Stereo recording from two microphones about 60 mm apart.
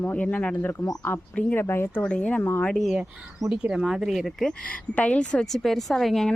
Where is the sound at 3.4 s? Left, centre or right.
Right.